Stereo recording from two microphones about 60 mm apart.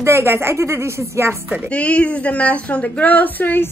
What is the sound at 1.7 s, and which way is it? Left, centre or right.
A woman's voice, left.